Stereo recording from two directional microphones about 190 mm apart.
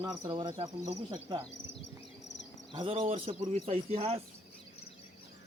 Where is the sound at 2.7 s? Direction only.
25° right (ahead or behind).